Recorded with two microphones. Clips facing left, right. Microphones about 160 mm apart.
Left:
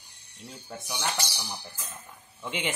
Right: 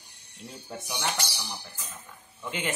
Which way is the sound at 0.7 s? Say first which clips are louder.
Right 1 dB; 10° right (ahead or behind).